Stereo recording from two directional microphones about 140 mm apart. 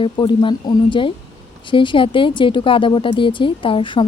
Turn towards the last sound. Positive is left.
turn(degrees=35)  # may be behind; listen again after turning